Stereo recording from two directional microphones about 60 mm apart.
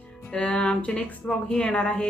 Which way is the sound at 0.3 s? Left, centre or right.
Centre.